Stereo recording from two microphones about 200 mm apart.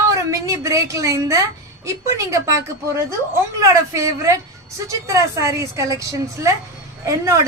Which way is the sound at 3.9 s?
15° right (ahead or behind).